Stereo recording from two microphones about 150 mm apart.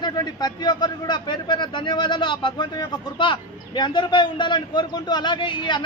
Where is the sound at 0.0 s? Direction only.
30° left (ahead or behind).